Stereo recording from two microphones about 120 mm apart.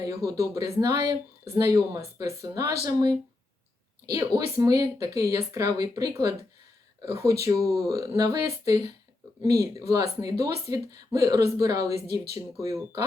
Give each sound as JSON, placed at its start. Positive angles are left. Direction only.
{"t": 0.0, "sound": "speech", "side_deg": -30}
{"t": 4.4, "sound": "speech", "side_deg": -25}